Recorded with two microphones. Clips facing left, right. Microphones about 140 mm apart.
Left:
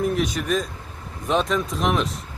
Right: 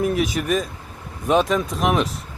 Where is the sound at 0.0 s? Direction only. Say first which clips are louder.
Right 2 dB; 5° right (ahead or behind).